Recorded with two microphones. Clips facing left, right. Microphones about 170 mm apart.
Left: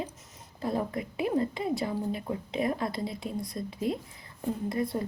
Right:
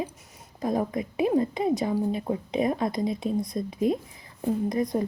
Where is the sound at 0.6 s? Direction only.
20° right (ahead or behind).